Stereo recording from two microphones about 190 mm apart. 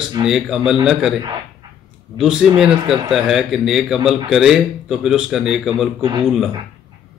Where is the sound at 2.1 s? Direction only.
Centre (ahead or behind).